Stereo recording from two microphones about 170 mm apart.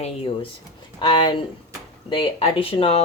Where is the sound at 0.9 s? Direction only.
25° left (ahead or behind).